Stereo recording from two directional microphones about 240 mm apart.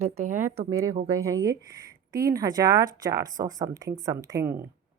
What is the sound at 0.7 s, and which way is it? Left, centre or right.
A woman's voice, centre.